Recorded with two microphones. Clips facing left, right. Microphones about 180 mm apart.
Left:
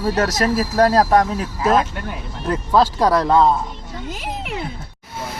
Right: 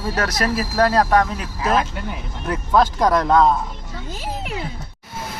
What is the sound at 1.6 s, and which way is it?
Speech, centre (ahead or behind).